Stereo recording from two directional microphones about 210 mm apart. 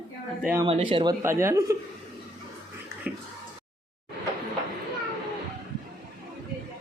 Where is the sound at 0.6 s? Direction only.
25° right (ahead or behind).